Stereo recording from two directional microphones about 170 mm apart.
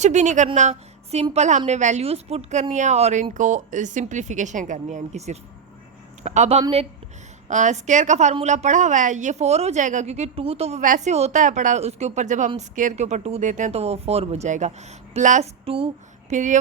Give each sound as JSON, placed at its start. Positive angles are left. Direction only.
{"t": 0.0, "sound": "a woman's voice", "side_deg": -45}
{"t": 16.3, "sound": "a woman's voice", "side_deg": -45}